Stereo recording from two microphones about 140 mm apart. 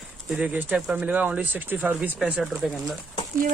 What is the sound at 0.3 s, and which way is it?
Speech, 10° right (ahead or behind).